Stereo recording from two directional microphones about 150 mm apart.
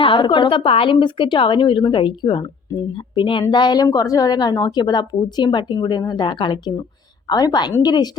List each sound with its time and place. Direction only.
0.0 s a woman's voice: 35° left (ahead or behind)